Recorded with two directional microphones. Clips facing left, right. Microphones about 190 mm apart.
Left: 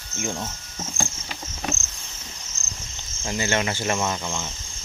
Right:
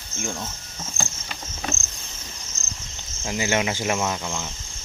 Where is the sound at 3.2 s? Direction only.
10° right (ahead or behind).